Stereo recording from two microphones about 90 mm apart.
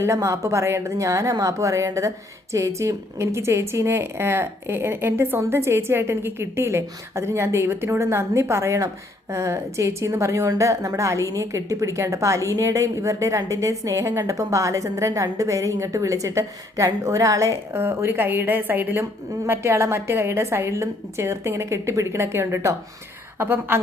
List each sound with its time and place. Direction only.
0.0 s a woman's voice: 35° right (ahead or behind)